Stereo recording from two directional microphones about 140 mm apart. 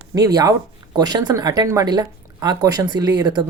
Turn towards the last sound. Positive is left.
turn(degrees=-30)  # may be behind; listen again after turning